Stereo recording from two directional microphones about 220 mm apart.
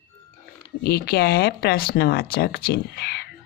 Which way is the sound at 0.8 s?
45° left (ahead or behind).